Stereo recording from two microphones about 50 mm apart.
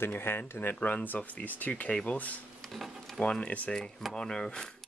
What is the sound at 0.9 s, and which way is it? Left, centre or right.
Speech, left.